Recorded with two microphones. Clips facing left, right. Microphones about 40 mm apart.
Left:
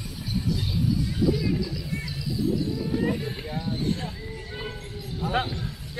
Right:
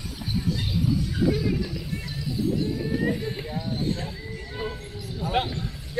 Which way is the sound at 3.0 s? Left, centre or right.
Centre.